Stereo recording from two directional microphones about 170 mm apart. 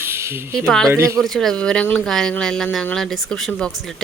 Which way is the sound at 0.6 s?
5° left (ahead or behind).